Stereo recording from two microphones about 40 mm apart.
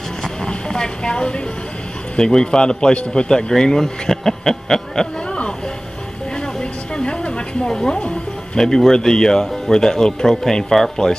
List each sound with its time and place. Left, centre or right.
0.5 s speech: left
6.4 s a sound: left
7.7 s music: centre
8.5 s speech: centre